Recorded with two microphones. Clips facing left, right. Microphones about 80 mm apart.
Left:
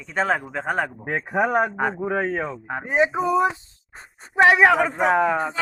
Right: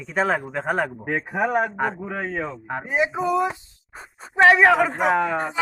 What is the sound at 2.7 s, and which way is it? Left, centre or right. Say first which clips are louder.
Speech: even; centre.